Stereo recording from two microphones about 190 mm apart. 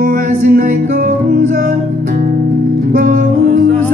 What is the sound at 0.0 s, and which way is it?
Music, 50° right (ahead or behind).